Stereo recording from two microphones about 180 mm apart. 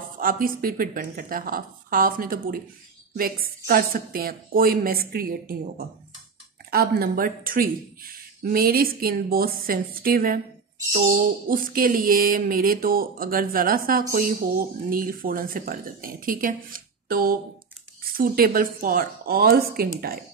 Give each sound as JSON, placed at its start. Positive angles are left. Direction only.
{"t": 0.2, "sound": "speech", "side_deg": -50}